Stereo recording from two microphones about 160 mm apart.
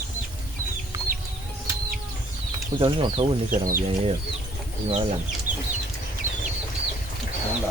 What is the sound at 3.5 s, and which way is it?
Speech, 60° right (ahead or behind).